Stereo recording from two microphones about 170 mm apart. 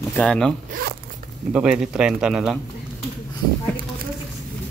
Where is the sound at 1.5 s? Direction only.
5° right (ahead or behind).